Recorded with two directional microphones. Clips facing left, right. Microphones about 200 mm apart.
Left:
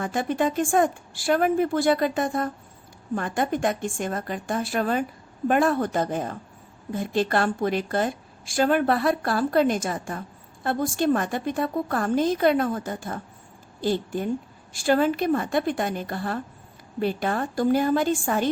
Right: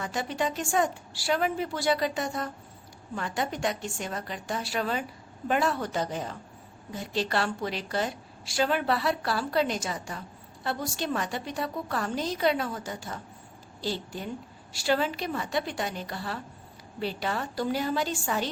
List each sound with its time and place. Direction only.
0.0 s a woman's voice: 50° left (ahead or behind)